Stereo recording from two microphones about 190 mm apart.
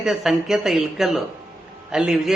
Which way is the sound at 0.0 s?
Centre (ahead or behind).